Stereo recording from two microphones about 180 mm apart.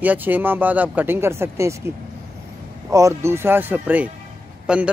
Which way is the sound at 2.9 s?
15° right (ahead or behind).